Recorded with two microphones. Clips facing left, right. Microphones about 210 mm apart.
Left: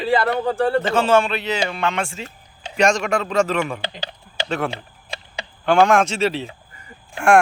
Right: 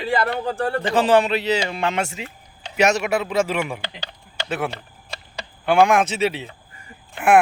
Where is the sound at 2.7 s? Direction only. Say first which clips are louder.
Even; 5° right (ahead or behind).